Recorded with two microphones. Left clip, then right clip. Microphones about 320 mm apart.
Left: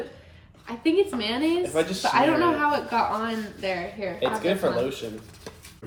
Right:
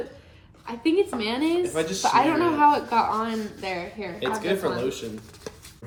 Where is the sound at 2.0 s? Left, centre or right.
Centre.